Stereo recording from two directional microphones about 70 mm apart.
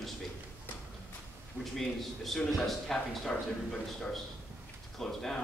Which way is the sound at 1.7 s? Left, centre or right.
Centre.